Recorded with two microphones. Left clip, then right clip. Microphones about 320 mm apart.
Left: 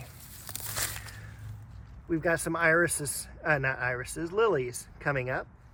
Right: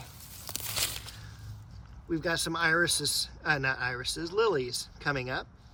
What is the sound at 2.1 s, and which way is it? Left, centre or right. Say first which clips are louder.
Speech: left 2 dB; centre.